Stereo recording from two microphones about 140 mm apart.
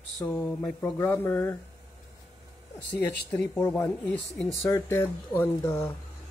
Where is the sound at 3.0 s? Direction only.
20° left (ahead or behind).